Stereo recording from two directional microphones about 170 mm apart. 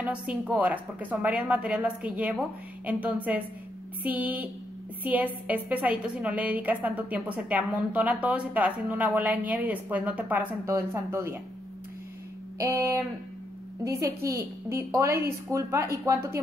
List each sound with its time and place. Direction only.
0.0 s a woman's voice: 10° right (ahead or behind)
12.5 s a woman's voice: 20° right (ahead or behind)